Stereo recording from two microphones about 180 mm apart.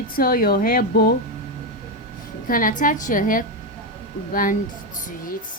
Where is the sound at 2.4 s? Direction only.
50° left (ahead or behind).